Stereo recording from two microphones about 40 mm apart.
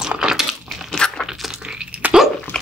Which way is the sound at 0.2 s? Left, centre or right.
Centre.